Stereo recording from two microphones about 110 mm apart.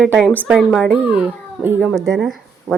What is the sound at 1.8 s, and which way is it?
Speech, centre (ahead or behind).